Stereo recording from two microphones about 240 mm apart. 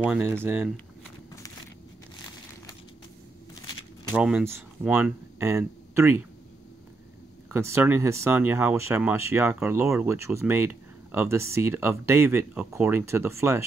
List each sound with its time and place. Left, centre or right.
0.0 s speech: centre
4.1 s speech: centre
7.4 s speech: centre